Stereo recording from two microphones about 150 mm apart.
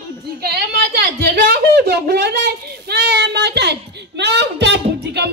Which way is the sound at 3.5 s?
90° right.